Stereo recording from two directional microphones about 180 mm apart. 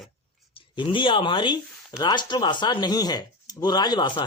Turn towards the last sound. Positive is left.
turn(degrees=25)  # may be behind; listen again after turning